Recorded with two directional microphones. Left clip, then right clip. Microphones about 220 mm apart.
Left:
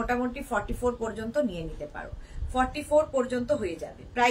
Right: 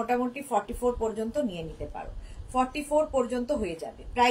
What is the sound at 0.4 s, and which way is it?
Speech, 15° left (ahead or behind).